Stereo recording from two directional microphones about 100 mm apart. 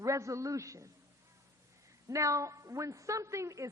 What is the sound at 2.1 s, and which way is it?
A woman's voice, 35° right (ahead or behind).